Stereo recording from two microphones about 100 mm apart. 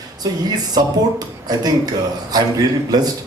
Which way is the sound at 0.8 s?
40° right (ahead or behind).